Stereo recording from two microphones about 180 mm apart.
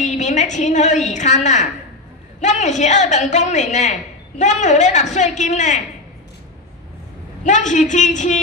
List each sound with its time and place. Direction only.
0.0 s a woman's voice: 40° left (ahead or behind)
7.4 s a woman's voice: 45° left (ahead or behind)